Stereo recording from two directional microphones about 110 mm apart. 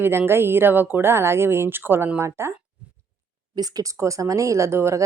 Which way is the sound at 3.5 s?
35° right (ahead or behind).